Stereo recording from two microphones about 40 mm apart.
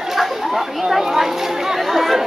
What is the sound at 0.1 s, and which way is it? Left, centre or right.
Chatter, centre.